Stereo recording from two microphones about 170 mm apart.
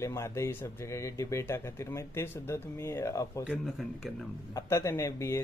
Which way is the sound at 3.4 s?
5° right (ahead or behind).